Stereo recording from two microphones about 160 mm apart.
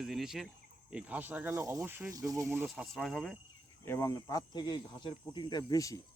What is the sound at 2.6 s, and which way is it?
Speech, centre (ahead or behind).